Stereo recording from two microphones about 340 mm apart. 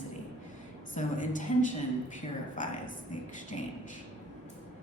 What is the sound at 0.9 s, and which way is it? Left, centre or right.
Speech, left.